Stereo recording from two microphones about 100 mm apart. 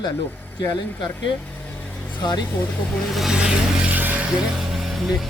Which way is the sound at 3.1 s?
5° right (ahead or behind).